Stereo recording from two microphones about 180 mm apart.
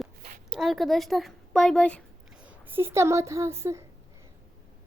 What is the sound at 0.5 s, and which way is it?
Speech, centre (ahead or behind).